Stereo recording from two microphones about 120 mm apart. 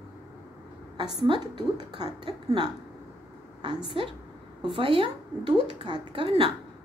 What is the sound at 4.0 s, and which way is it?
A woman's voice, 50° right (ahead or behind).